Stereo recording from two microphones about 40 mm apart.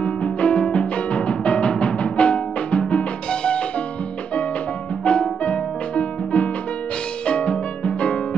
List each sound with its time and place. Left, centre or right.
0.0 s music: left
5.0 s music: left